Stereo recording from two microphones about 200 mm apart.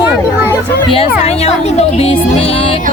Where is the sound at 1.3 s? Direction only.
30° left (ahead or behind).